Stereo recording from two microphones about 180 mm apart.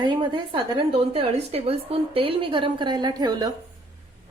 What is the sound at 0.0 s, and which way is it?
A woman's voice, 25° right (ahead or behind).